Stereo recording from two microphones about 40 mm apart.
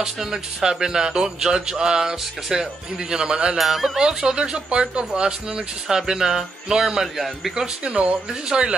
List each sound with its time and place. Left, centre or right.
0.0 s speech: centre
3.5 s speech: centre
4.4 s speech: right; by 7.5 s centre
7.5 s speech: right